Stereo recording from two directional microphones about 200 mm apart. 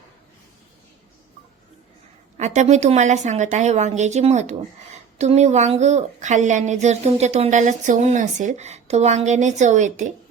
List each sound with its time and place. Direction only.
2.4 s a woman's voice: 35° right (ahead or behind)